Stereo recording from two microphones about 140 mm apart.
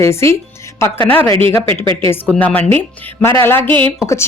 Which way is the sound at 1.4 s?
40° right (ahead or behind).